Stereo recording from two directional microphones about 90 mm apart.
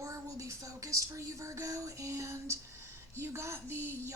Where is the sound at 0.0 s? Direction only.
35° right (ahead or behind).